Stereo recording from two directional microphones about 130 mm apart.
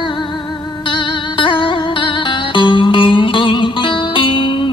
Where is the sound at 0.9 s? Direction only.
40° left (ahead or behind).